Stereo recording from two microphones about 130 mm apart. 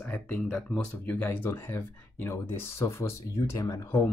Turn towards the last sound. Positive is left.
turn(degrees=25)  # may be behind; listen again after turning